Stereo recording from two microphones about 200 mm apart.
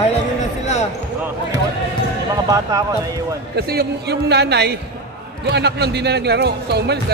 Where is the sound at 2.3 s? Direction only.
15° right (ahead or behind).